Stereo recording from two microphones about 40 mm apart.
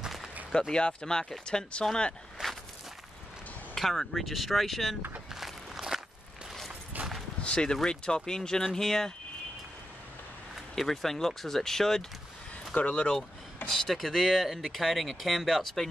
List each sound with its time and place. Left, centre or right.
0.5 s speech: centre
2.4 s walk: centre
3.7 s speech: centre
5.3 s walk: centre
6.9 s a sound: right
7.4 s speech: left
10.8 s speech: centre
12.7 s speech: left
13.7 s speech: centre